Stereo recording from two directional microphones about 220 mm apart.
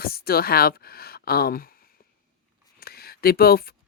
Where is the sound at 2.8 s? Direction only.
45° left (ahead or behind).